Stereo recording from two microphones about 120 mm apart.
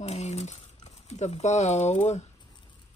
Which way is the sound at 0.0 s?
65° left (ahead or behind).